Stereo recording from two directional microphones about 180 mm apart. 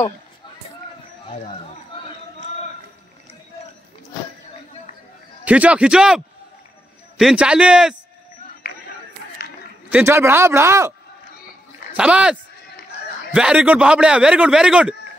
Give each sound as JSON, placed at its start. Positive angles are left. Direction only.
{"t": 5.4, "sound": "a man's voice", "side_deg": -10}
{"t": 8.6, "sound": "a sound", "side_deg": 50}
{"t": 9.8, "sound": "speech", "side_deg": -10}
{"t": 11.9, "sound": "a man's voice", "side_deg": -5}